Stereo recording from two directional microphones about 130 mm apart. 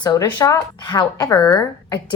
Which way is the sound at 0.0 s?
30° left (ahead or behind).